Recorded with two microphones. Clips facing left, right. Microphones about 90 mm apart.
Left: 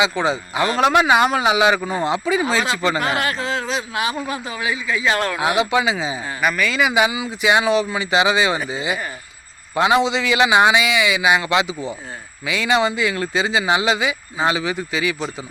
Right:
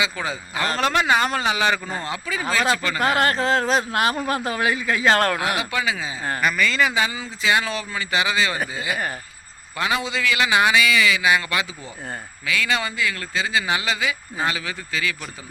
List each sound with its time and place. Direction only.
0.0 s speech: 20° left (ahead or behind)
3.0 s speech: 45° right (ahead or behind)
5.4 s speech: 20° left (ahead or behind)
6.4 s speech: 5° left (ahead or behind)